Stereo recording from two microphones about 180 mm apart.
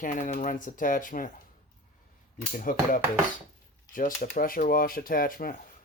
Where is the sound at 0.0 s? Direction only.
45° left (ahead or behind).